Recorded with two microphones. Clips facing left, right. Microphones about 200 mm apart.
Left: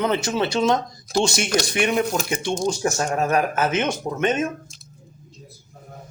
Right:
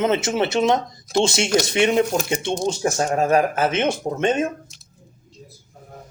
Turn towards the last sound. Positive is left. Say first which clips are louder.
# right 2 dB
turn(degrees=-30)  # may be behind; listen again after turning